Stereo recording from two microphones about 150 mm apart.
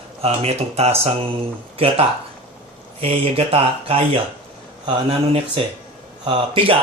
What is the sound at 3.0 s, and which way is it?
Speech, 40° right (ahead or behind).